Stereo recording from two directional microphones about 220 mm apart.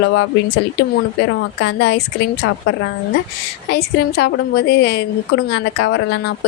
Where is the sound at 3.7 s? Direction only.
50° left (ahead or behind).